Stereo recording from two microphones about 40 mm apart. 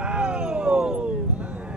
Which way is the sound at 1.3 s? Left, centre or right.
Right.